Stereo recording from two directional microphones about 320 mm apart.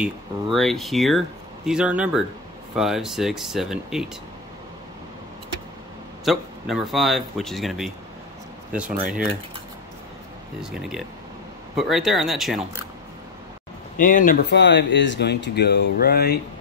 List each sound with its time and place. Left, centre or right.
0.0 s a man's voice: centre
6.2 s a man's voice: centre
9.0 s a man's voice: centre
10.6 s a man's voice: centre
13.9 s speech: left